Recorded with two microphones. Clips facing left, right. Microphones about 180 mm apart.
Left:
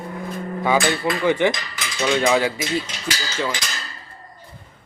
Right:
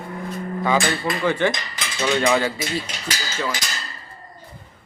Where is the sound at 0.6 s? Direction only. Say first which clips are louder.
Left 2 dB; 10° left (ahead or behind).